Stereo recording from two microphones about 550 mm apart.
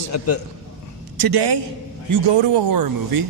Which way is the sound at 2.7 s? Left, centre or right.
Right.